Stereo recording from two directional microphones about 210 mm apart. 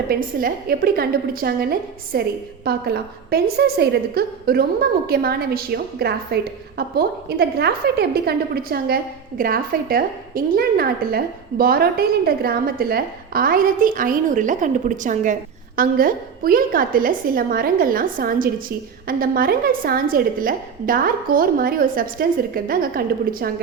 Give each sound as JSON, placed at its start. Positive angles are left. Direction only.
{"t": 0.1, "sound": "a woman's voice", "side_deg": -40}